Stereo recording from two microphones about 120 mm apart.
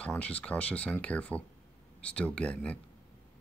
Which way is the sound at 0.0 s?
10° left (ahead or behind).